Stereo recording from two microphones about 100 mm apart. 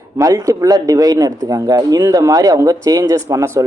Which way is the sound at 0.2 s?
35° right (ahead or behind).